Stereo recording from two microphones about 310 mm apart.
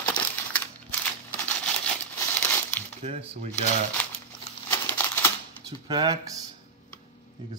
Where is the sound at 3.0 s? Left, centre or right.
Centre.